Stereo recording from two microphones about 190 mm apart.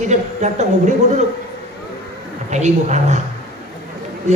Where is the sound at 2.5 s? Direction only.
40° right (ahead or behind).